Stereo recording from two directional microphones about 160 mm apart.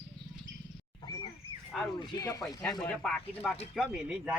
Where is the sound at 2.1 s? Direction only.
20° left (ahead or behind).